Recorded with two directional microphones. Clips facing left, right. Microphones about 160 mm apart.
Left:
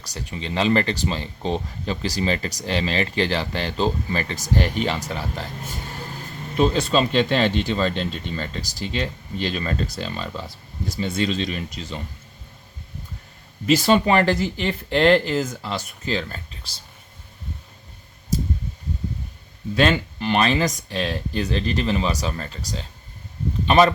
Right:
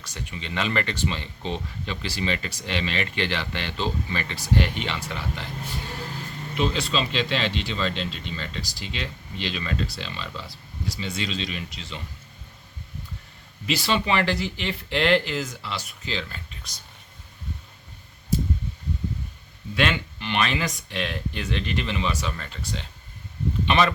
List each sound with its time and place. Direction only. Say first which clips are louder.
0.0 s speech: left 4 dB; 35° left (ahead or behind)
13.7 s speech: left 7 dB; 45° left (ahead or behind)
19.7 s speech: left 5 dB; 40° left (ahead or behind)